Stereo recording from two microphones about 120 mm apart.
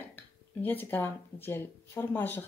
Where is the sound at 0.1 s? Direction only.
15° left (ahead or behind).